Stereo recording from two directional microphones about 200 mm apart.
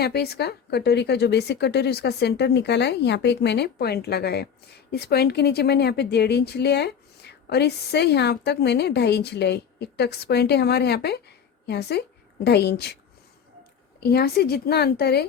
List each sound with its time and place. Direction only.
0.0 s a woman's voice: 55° left (ahead or behind)
14.0 s a woman's voice: 50° left (ahead or behind)